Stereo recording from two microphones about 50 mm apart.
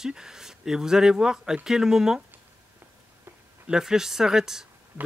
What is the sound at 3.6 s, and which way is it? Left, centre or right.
Speech, centre.